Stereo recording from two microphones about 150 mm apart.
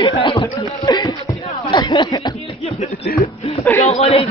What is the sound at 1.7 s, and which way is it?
Chuckle, 30° left (ahead or behind).